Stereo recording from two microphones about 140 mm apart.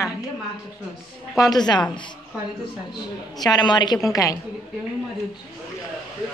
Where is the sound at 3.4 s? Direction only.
30° left (ahead or behind).